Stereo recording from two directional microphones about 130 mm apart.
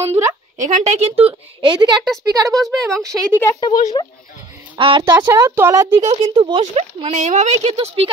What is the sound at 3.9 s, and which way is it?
Speech, 40° left (ahead or behind).